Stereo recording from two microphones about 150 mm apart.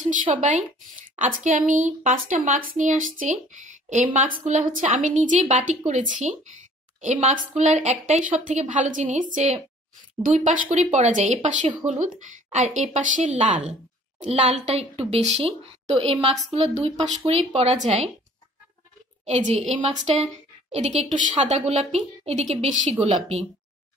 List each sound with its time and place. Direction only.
0.4 s a woman's voice: 55° right (ahead or behind)
19.2 s a woman's voice: 50° right (ahead or behind)